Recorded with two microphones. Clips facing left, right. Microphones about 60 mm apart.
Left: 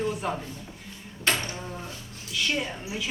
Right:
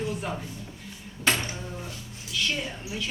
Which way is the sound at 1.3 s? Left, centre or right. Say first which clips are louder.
Right 1 dB; centre.